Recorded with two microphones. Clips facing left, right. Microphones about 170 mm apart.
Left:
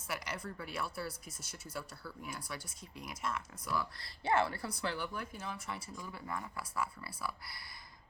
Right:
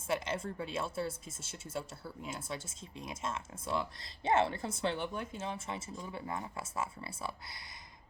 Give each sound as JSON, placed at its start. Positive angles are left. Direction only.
{"t": 0.1, "sound": "speech", "side_deg": -25}